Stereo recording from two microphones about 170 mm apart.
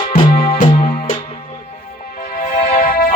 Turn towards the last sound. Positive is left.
turn(degrees=50)  # may be behind; listen again after turning